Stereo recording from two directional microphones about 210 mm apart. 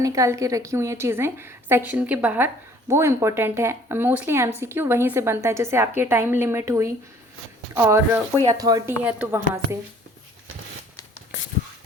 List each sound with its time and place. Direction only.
0.0 s a woman's voice: 15° right (ahead or behind)